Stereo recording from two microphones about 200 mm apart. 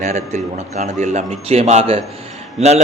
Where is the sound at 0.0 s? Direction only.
35° right (ahead or behind).